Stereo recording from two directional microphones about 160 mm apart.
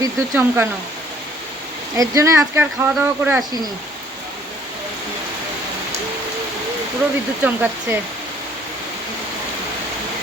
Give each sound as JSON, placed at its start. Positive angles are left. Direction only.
{"t": 0.0, "sound": "speech", "side_deg": -15}
{"t": 2.0, "sound": "speech", "side_deg": -20}
{"t": 7.4, "sound": "speech", "side_deg": -10}